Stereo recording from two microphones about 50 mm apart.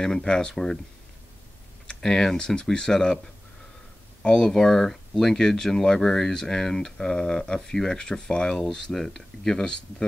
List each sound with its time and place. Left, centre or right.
0.0 s speech: centre
1.9 s speech: centre
4.2 s speech: centre